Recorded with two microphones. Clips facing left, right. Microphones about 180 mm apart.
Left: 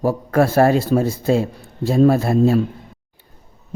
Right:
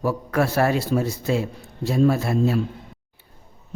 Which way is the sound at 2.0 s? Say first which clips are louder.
Left 5 dB; 50° left (ahead or behind).